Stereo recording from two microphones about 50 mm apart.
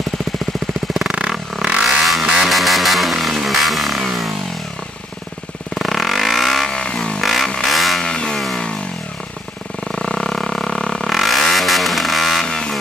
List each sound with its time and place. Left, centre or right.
1.1 s vehicle: centre
5.8 s vehicle: centre
6.8 s vehicle: centre
7.2 s vehicle: centre
8.0 s vehicle: centre
9.9 s vehicle: centre
12.4 s a sound: centre